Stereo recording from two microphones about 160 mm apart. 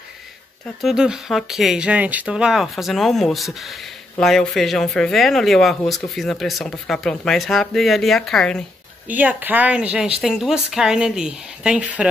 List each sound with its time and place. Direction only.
0.7 s speech: centre (ahead or behind)
9.0 s a woman's voice: 10° right (ahead or behind)